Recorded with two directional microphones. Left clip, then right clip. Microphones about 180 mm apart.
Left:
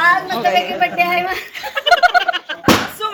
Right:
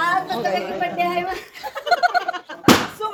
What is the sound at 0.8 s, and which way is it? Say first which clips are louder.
Speech: left 6 dB; 5° right (ahead or behind).